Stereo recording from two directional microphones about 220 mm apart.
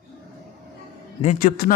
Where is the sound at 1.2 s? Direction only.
35° left (ahead or behind).